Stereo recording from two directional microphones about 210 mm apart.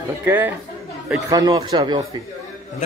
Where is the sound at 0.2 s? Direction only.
10° right (ahead or behind).